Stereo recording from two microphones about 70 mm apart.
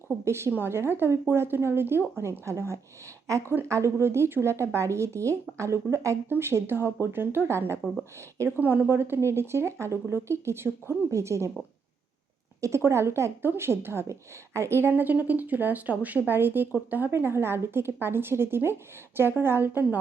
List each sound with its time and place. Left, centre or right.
0.3 s speech: right
12.6 s speech: right